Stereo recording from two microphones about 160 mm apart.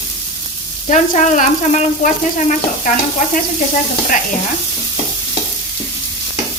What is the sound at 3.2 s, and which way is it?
Sizzle, 60° left (ahead or behind).